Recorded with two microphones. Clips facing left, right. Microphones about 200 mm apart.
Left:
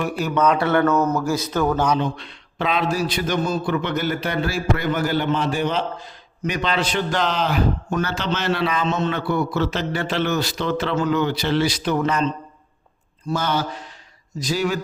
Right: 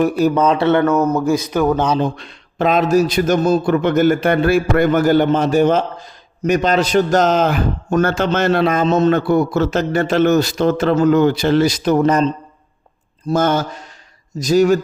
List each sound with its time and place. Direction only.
0.0 s speech: 40° right (ahead or behind)
0.9 s speech: 10° right (ahead or behind)
2.0 s a man's voice: 45° right (ahead or behind)